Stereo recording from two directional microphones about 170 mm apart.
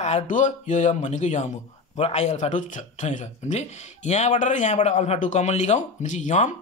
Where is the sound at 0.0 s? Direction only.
45° left (ahead or behind).